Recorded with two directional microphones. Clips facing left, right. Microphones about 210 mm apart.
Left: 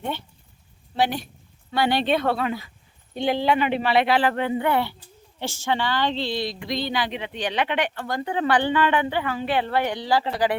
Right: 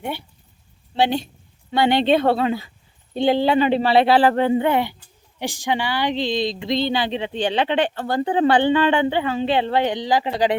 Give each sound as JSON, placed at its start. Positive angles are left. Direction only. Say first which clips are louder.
{"t": 0.0, "sound": "speech", "louder": "right 1 dB", "side_deg": -10}
{"t": 0.9, "sound": "speech", "louder": "right 4 dB", "side_deg": -25}